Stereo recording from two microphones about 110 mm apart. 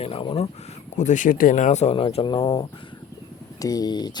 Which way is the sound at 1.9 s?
60° left (ahead or behind).